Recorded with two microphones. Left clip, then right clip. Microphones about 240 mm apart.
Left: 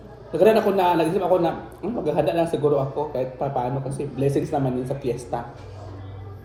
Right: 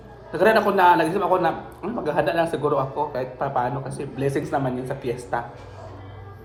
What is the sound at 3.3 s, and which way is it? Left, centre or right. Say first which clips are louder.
Speech: right 4 dB; right.